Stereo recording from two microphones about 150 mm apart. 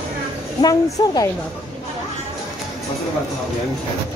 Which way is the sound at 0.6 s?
25° left (ahead or behind).